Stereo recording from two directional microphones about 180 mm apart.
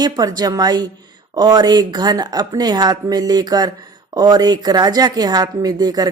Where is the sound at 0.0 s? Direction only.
20° right (ahead or behind).